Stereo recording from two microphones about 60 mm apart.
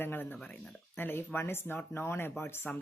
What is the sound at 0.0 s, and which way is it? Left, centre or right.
Speech, left.